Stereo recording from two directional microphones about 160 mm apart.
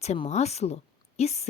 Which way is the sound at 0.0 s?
45° left (ahead or behind).